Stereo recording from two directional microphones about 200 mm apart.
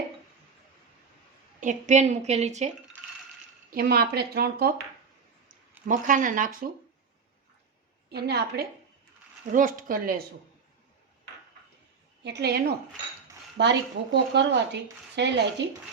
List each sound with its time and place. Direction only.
1.6 s a woman's voice: 35° right (ahead or behind)
3.7 s speech: 50° right (ahead or behind)
5.9 s a woman's voice: 40° right (ahead or behind)
8.1 s speech: 55° right (ahead or behind)
9.5 s speech: 40° right (ahead or behind)
12.2 s speech: 55° right (ahead or behind)